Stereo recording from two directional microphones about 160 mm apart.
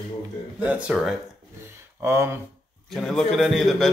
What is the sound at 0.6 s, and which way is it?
Speech, 10° right (ahead or behind).